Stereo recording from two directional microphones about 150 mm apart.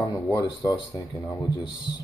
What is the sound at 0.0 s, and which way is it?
Speech, 25° left (ahead or behind).